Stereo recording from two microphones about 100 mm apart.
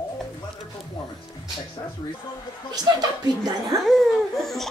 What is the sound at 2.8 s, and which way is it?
Speech, 45° right (ahead or behind).